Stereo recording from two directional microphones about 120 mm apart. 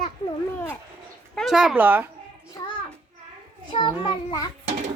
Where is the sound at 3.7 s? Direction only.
45° left (ahead or behind).